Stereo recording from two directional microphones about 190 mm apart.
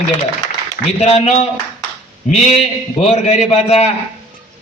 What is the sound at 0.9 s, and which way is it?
Speech, 35° left (ahead or behind).